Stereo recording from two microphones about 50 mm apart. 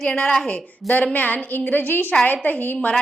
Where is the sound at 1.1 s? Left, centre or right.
Left.